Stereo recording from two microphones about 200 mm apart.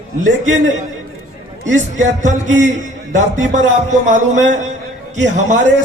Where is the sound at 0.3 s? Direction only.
40° right (ahead or behind).